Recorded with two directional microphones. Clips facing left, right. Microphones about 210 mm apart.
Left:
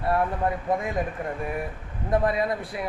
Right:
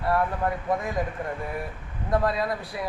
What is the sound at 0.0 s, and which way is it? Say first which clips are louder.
Speech: left 1 dB; 25° left (ahead or behind).